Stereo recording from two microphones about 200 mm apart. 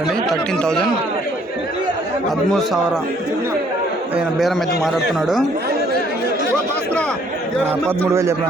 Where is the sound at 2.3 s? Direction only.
Centre (ahead or behind).